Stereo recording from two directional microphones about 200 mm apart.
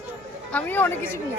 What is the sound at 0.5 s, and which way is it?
Speech, 10° left (ahead or behind).